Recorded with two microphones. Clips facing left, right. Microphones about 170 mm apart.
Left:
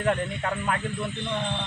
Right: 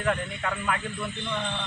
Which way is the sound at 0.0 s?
30° left (ahead or behind).